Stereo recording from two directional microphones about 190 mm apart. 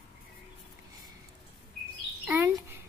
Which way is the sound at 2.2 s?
10° right (ahead or behind).